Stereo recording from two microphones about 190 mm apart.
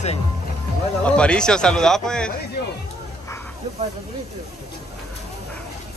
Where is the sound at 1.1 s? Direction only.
5° left (ahead or behind).